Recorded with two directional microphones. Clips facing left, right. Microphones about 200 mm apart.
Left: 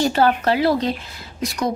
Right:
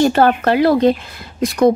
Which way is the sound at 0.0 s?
55° right (ahead or behind).